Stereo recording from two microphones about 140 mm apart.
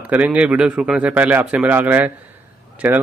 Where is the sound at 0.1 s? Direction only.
10° right (ahead or behind).